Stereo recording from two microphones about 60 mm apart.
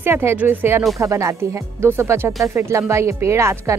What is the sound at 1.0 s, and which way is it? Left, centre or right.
Speech, right.